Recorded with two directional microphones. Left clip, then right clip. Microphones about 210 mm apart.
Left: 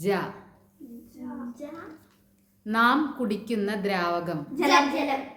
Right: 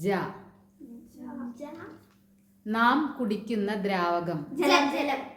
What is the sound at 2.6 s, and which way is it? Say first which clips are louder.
A woman's voice: left 2 dB; 5° left (ahead or behind).